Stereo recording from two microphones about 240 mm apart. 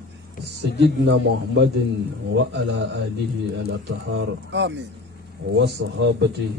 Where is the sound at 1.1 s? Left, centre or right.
Right.